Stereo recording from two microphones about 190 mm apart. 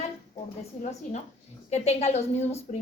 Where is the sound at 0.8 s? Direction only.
35° left (ahead or behind).